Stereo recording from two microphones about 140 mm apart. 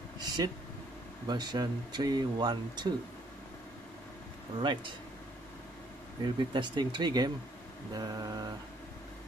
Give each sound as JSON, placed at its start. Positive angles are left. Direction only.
{"t": 0.4, "sound": "mantra", "side_deg": -25}
{"t": 1.2, "sound": "speech", "side_deg": -30}
{"t": 4.6, "sound": "speech", "side_deg": -35}
{"t": 6.2, "sound": "speech", "side_deg": -35}
{"t": 7.9, "sound": "mantra", "side_deg": -30}